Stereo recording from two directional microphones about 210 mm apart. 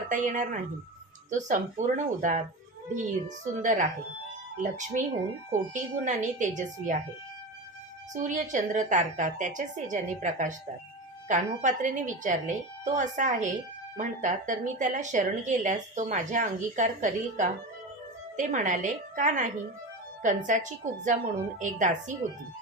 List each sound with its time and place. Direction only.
0.1 s a woman's voice: 35° right (ahead or behind)
8.1 s a woman's voice: 35° right (ahead or behind)